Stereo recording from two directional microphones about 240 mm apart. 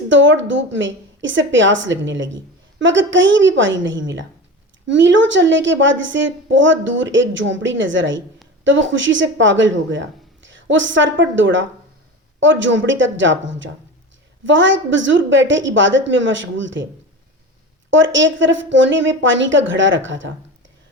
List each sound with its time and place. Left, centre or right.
0.1 s a woman's voice: right
17.9 s a woman's voice: right